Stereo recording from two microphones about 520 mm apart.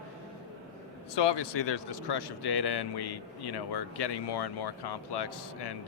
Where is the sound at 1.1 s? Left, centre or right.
Left.